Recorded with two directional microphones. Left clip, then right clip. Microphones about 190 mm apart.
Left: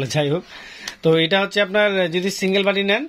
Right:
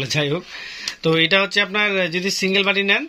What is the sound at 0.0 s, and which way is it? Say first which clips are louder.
Speech: even; 55° left (ahead or behind).